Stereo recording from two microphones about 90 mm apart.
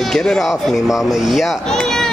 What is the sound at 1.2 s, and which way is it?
Speech, centre (ahead or behind).